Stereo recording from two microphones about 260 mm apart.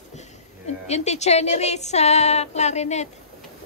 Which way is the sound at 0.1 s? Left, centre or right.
Left.